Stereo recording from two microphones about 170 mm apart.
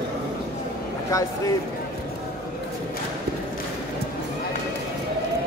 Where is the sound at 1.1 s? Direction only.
20° left (ahead or behind).